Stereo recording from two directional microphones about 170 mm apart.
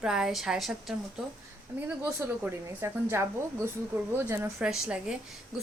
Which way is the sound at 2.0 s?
15° right (ahead or behind).